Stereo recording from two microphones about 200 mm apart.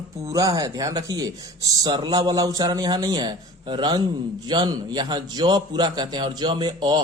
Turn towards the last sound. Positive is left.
turn(degrees=-20)  # may be behind; listen again after turning